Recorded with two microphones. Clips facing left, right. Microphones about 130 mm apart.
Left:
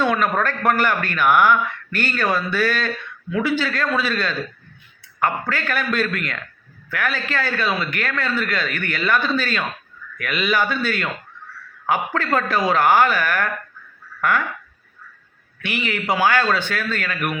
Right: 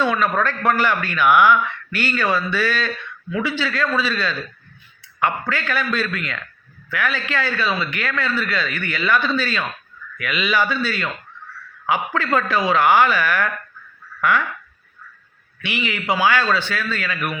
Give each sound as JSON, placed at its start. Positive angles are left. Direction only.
{"t": 0.0, "sound": "a man's voice", "side_deg": 50}
{"t": 14.2, "sound": "duck", "side_deg": 45}
{"t": 15.6, "sound": "a man's voice", "side_deg": 45}